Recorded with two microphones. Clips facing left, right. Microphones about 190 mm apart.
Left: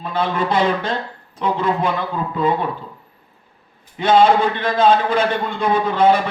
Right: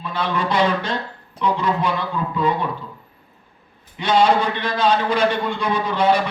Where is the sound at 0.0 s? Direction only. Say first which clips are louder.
Left 3 dB; 50° left (ahead or behind).